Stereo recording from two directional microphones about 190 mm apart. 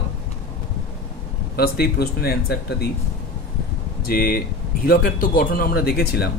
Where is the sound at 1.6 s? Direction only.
55° left (ahead or behind).